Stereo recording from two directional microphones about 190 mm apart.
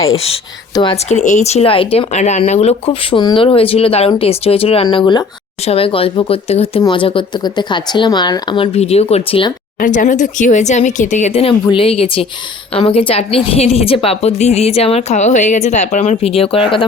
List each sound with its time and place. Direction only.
0.7 s speech: 20° left (ahead or behind)
1.1 s speech: 35° left (ahead or behind)
9.8 s speech: 45° left (ahead or behind); by 16.8 s 30° left (ahead or behind)